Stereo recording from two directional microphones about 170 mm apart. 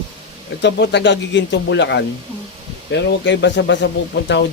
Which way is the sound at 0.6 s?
90° left.